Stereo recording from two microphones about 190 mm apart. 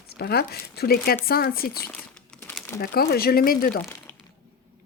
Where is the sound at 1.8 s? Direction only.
5° left (ahead or behind).